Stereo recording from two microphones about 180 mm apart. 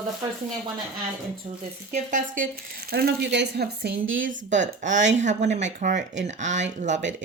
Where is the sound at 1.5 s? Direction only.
35° right (ahead or behind).